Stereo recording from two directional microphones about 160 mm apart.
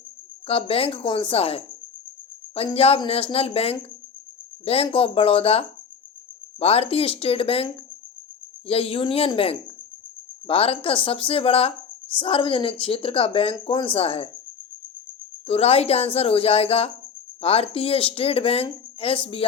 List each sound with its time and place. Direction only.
0.4 s speech: 35° left (ahead or behind)
2.7 s speech: 35° left (ahead or behind)
15.4 s speech: 40° left (ahead or behind)